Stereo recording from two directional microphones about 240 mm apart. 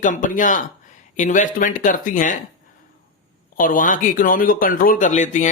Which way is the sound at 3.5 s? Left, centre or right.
Left.